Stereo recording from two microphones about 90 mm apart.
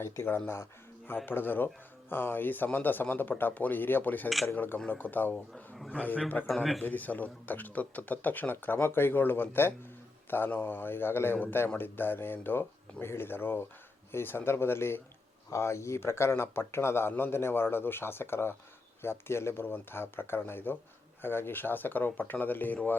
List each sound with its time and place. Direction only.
0.0 s a man's voice: 25° left (ahead or behind)